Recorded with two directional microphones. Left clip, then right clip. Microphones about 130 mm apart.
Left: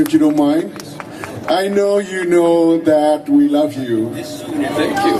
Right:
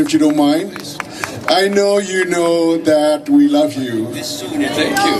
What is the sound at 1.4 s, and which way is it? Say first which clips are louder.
Mantra: right 2 dB; 35° right (ahead or behind).